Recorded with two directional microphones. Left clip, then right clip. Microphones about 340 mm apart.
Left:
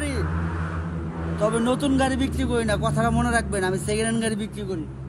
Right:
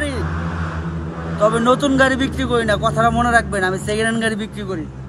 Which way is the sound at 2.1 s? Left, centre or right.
Centre.